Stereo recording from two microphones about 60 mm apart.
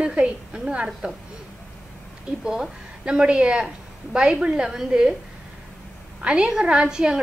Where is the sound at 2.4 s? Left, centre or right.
Centre.